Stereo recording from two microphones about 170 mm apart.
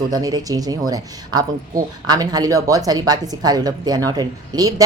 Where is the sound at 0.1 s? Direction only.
20° right (ahead or behind).